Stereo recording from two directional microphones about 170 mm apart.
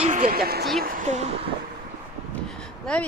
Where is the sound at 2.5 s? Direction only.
5° left (ahead or behind).